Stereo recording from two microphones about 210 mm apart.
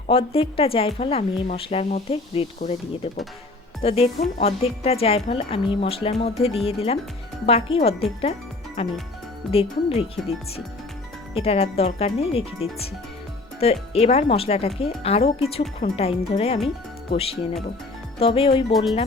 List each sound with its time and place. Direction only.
0.1 s speech: 25° left (ahead or behind)
8.2 s music: 30° left (ahead or behind)
9.5 s speech: 30° left (ahead or behind)
11.3 s speech: 30° left (ahead or behind)
13.6 s speech: 25° left (ahead or behind)